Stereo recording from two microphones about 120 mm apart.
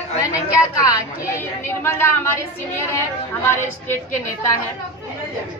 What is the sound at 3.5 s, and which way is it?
Speech, 20° left (ahead or behind).